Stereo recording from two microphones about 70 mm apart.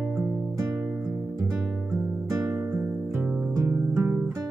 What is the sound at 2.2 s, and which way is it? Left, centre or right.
Music, right.